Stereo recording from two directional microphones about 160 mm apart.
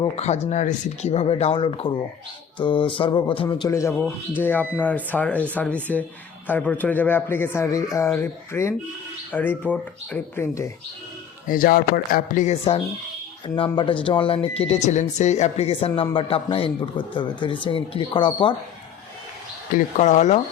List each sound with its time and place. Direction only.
0.2 s speech: 45° left (ahead or behind)
3.7 s a man's voice: 15° left (ahead or behind)
11.4 s speech: 60° left (ahead or behind)
13.6 s speech: 30° left (ahead or behind)
19.7 s speech: 50° left (ahead or behind)